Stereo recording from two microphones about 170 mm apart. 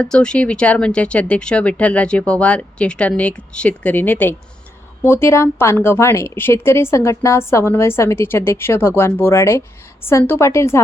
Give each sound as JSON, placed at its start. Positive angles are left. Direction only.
{"t": 0.0, "sound": "speech", "side_deg": 5}